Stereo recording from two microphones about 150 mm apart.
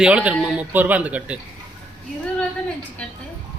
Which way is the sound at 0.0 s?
10° right (ahead or behind).